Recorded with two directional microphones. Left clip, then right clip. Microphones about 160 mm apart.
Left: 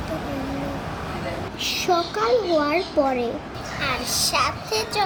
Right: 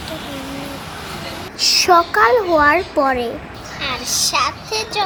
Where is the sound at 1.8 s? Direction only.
20° right (ahead or behind).